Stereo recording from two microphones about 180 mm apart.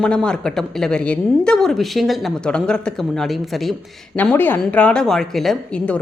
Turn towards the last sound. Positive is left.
turn(degrees=5)  # may be behind; listen again after turning